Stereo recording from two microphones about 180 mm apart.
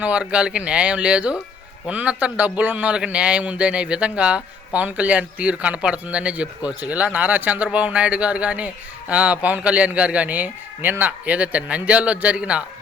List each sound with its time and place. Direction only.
0.0 s a man's voice: 5° right (ahead or behind)